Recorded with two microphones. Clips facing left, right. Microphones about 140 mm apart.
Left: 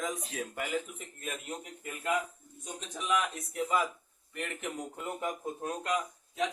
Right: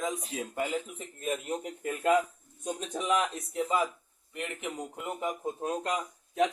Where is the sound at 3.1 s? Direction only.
30° right (ahead or behind).